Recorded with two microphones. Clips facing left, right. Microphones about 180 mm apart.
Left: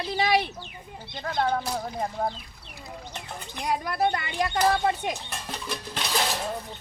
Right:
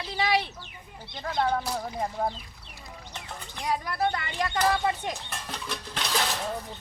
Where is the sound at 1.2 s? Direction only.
Centre (ahead or behind).